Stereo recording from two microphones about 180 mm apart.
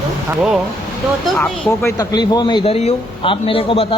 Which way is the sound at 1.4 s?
5° left (ahead or behind).